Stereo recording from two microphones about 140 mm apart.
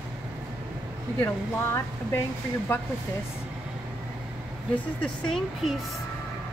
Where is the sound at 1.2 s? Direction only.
20° left (ahead or behind).